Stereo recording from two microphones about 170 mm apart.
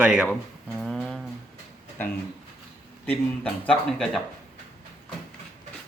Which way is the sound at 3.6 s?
5° left (ahead or behind).